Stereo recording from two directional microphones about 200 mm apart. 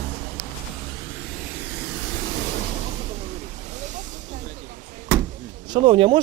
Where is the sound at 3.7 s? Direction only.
35° right (ahead or behind).